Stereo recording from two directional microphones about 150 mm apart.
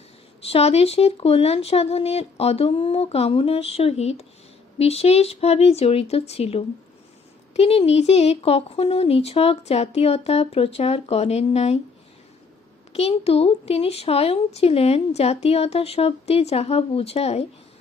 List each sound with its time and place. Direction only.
0.4 s a woman's voice: 40° left (ahead or behind)
12.9 s a woman's voice: 45° left (ahead or behind)